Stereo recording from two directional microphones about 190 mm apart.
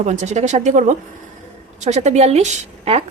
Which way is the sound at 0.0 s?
35° right (ahead or behind).